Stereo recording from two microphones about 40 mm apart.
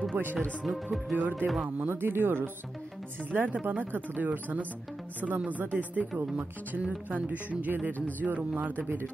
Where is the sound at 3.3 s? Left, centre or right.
Right.